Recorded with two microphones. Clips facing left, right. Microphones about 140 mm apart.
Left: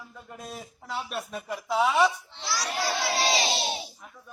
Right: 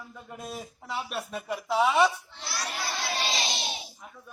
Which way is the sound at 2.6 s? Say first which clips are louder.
Left 5 dB; 90° left.